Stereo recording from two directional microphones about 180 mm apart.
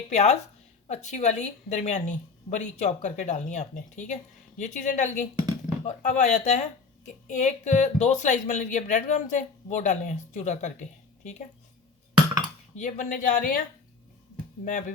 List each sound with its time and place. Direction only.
0.1 s a woman's voice: 40° left (ahead or behind)
12.7 s speech: 45° left (ahead or behind)
14.6 s speech: 45° left (ahead or behind)